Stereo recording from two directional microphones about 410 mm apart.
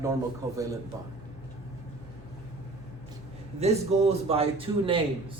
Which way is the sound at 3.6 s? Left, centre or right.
Centre.